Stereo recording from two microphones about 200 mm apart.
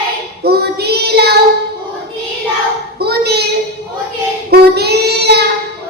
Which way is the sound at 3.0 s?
55° right (ahead or behind).